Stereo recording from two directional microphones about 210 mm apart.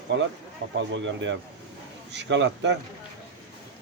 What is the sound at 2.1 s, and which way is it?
Speech, 60° right (ahead or behind).